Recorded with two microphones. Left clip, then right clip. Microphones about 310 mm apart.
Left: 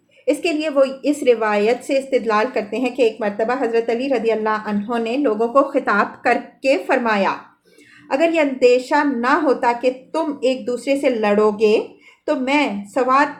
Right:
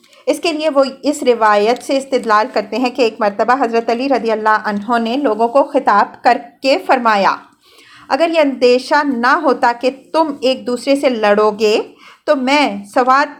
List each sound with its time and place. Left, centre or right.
0.3 s a woman's voice: right